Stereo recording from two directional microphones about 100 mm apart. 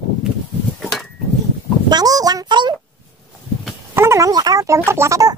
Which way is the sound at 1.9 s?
40° right (ahead or behind).